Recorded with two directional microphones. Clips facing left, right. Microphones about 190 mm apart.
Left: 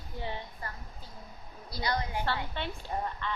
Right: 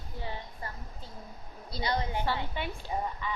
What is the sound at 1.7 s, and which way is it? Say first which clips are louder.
A woman's voice: right 1 dB; 25° right (ahead or behind).